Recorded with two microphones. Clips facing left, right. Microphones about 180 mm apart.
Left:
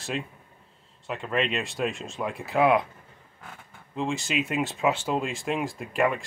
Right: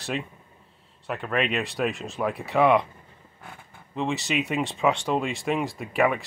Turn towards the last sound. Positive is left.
turn(degrees=-5)  # may be behind; listen again after turning